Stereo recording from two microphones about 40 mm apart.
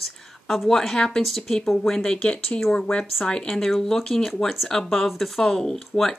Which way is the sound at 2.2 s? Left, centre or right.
Left.